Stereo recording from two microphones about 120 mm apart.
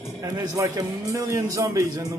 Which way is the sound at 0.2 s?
30° right (ahead or behind).